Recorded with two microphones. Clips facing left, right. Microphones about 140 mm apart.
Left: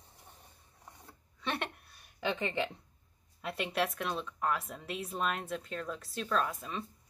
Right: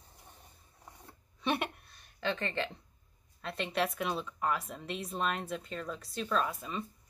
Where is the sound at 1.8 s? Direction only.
10° left (ahead or behind).